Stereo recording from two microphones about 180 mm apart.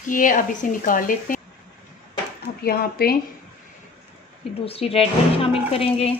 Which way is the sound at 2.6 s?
60° left (ahead or behind).